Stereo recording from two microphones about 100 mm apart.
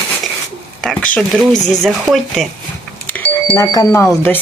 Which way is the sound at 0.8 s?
10° left (ahead or behind).